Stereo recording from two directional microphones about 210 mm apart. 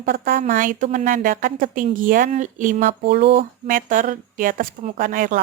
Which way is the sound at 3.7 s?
40° right (ahead or behind).